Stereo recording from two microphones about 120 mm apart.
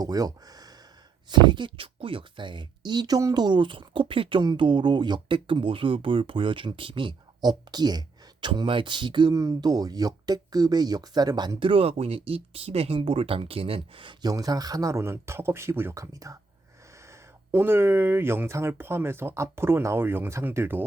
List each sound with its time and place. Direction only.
0.0 s a sound: 30° right (ahead or behind)
1.3 s speech: 40° right (ahead or behind)
11.7 s speech: 55° right (ahead or behind); by 20.8 s 20° right (ahead or behind)